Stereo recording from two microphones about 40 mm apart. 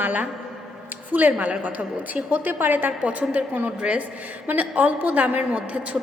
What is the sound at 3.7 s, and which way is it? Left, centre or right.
Speech, right.